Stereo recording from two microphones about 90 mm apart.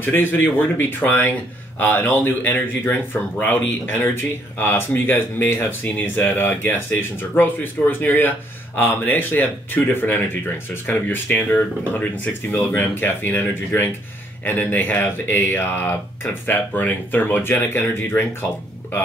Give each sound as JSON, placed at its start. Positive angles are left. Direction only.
{"t": 0.0, "sound": "speech", "side_deg": 25}